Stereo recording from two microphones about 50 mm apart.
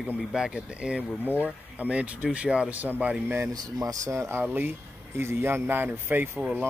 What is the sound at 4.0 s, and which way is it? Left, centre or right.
Speech, right.